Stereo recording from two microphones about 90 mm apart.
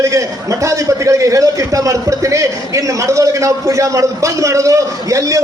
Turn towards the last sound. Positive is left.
turn(degrees=-40)  # may be behind; listen again after turning